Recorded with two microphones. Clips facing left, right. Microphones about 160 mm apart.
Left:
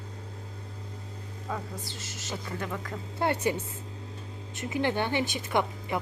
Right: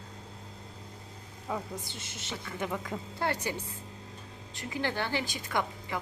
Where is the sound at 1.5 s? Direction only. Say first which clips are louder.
Even; 10° right (ahead or behind).